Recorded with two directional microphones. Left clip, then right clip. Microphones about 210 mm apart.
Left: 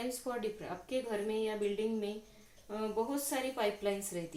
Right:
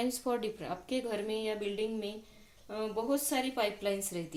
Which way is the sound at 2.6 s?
50° right (ahead or behind).